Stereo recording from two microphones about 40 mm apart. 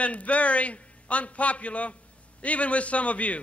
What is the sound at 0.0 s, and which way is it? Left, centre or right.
A man's voice, left.